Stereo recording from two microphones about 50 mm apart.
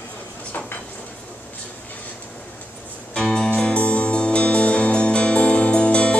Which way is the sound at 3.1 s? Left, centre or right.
Centre.